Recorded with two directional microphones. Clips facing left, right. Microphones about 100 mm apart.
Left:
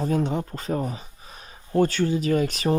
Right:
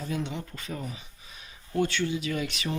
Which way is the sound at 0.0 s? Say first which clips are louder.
Left 9 dB; 40° left (ahead or behind).